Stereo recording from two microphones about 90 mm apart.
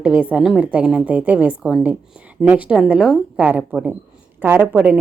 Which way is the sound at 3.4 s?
15° right (ahead or behind).